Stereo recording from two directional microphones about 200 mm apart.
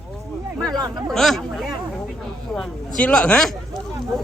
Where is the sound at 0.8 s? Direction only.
20° right (ahead or behind).